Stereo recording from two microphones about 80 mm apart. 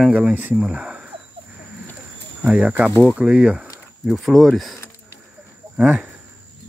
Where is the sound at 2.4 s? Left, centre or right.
Centre.